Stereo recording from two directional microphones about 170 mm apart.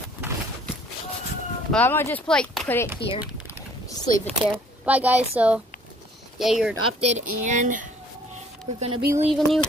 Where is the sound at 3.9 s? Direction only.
20° left (ahead or behind).